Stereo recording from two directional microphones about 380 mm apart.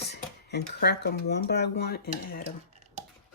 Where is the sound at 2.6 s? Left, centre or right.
Centre.